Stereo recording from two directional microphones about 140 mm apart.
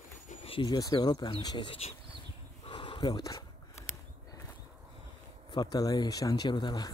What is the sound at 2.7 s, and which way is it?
Dog, 35° left (ahead or behind).